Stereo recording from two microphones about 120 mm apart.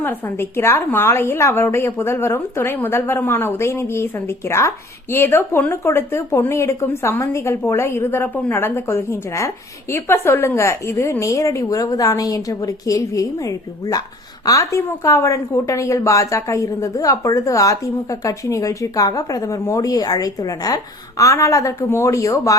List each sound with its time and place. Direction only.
0.0 s a woman's voice: 20° left (ahead or behind)